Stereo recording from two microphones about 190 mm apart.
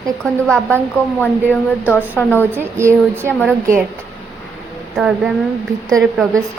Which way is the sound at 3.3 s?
5° left (ahead or behind).